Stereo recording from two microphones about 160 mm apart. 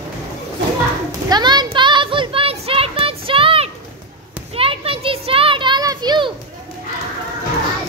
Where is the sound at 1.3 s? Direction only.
25° right (ahead or behind).